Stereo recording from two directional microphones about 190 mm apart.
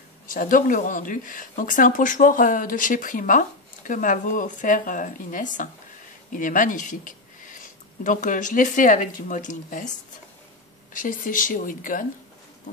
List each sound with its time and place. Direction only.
0.3 s speech: 45° left (ahead or behind)